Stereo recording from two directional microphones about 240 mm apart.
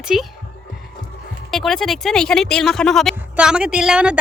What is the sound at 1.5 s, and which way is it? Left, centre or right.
Speech, centre.